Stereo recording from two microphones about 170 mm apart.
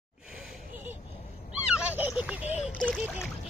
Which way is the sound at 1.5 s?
10° right (ahead or behind).